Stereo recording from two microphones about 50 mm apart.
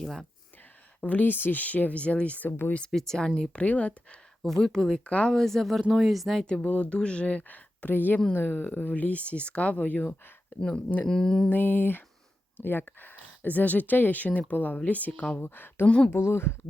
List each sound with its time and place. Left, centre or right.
0.0 s speech: centre
1.0 s speech: left
2.5 s a sound: left
2.9 s speech: centre
3.5 s speech: left
4.4 s speech: centre
5.0 s speech: left
5.3 s speech: centre
6.4 s speech: centre; by 10.2 s left
10.6 s speech: centre
11.5 s a sound: left
12.5 s speech: left
15.4 s a sound: left